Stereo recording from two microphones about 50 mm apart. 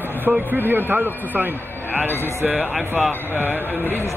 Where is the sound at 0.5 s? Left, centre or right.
Right.